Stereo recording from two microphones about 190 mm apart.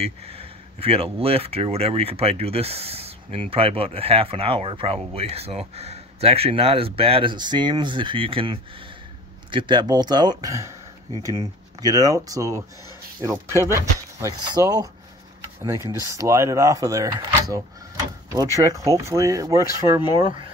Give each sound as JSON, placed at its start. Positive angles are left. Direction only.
{"t": 0.0, "sound": "speech", "side_deg": -30}
{"t": 20.2, "sound": "speech", "side_deg": -25}